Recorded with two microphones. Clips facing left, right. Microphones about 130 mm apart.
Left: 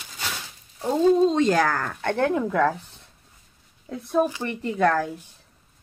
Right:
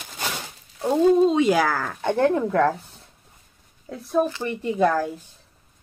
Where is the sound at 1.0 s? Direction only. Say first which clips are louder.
Right 1 dB; 5° right (ahead or behind).